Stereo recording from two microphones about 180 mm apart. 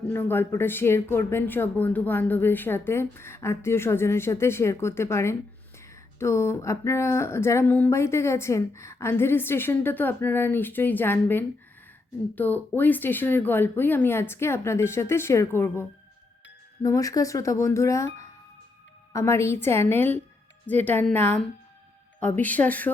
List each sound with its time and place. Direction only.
0.1 s speech: 10° left (ahead or behind)